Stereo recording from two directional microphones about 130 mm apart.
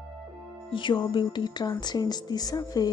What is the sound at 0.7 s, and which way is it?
Speech, 35° left (ahead or behind).